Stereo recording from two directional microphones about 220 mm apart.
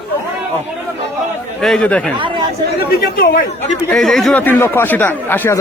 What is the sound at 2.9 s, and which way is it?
Speech, 45° left (ahead or behind).